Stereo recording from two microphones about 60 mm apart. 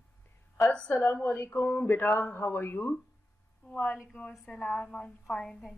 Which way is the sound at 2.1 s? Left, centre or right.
Left.